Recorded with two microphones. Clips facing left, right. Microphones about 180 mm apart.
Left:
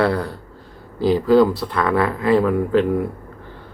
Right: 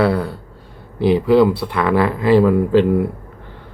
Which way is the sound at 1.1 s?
15° right (ahead or behind).